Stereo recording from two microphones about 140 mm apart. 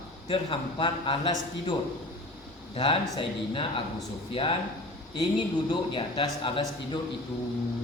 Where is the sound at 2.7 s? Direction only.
40° left (ahead or behind).